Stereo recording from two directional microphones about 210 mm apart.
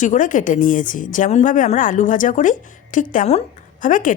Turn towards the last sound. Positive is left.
turn(degrees=40)  # may be behind; listen again after turning